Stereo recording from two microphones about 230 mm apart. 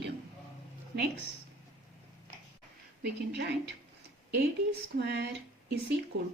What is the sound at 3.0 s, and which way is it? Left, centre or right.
Speech, right.